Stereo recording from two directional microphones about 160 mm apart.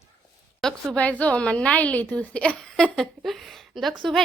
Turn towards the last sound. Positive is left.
turn(degrees=0)  # may be behind; listen again after turning